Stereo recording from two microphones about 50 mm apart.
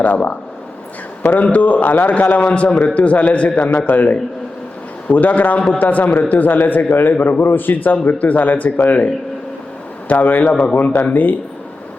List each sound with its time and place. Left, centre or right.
0.0 s a man's voice: left
10.1 s a man's voice: left